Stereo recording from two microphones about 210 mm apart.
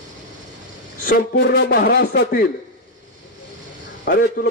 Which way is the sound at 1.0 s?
45° left (ahead or behind).